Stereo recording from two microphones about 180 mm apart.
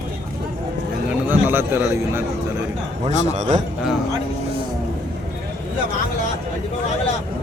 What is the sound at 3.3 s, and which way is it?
Speech, 45° right (ahead or behind).